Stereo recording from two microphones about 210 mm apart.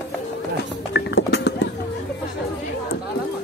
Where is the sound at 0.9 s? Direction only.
50° left (ahead or behind).